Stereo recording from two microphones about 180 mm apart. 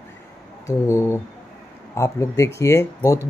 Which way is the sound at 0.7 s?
15° left (ahead or behind).